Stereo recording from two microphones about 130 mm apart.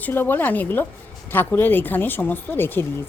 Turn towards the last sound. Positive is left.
turn(degrees=15)  # may be behind; listen again after turning